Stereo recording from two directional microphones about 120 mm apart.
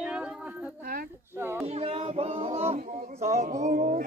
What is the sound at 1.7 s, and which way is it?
Singing, 55° right (ahead or behind).